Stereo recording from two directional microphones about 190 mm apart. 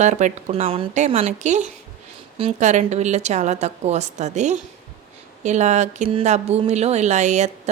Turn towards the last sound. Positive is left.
turn(degrees=-40)  # may be behind; listen again after turning